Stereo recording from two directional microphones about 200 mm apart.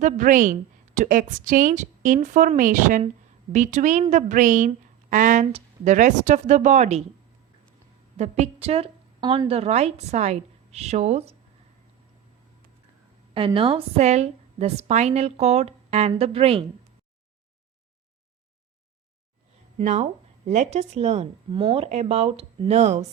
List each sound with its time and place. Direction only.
0.0 s a woman's voice: 40° right (ahead or behind)
8.1 s a woman's voice: 35° right (ahead or behind)
13.3 s a woman's voice: 25° right (ahead or behind)
19.8 s a woman's voice: 40° right (ahead or behind)